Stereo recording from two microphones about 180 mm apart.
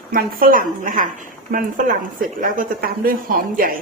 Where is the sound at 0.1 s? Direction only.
55° right (ahead or behind).